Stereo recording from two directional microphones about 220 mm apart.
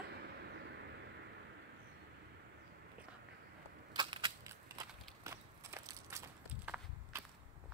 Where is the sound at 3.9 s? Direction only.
20° right (ahead or behind).